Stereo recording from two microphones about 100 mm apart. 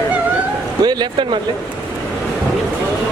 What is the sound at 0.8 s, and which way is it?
Speech, 50° right (ahead or behind).